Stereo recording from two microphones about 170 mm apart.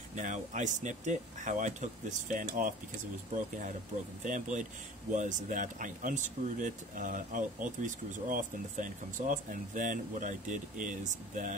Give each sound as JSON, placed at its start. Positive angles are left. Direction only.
{"t": 0.1, "sound": "speech", "side_deg": -45}
{"t": 4.2, "sound": "speech", "side_deg": -50}